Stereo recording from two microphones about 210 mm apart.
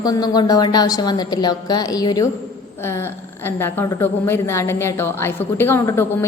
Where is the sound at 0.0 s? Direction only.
20° left (ahead or behind).